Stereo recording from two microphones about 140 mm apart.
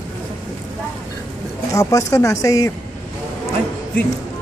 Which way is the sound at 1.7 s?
20° left (ahead or behind).